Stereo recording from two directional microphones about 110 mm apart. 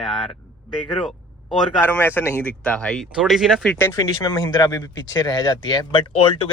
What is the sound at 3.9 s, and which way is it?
Speech, 35° left (ahead or behind).